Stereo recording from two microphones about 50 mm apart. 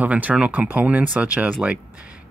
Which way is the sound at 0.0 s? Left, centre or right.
Right.